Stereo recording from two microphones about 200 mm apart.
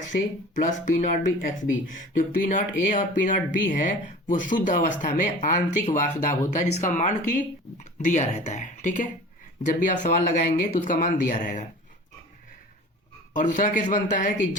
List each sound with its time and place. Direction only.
0.2 s speech: 40° left (ahead or behind)
13.3 s speech: 40° left (ahead or behind)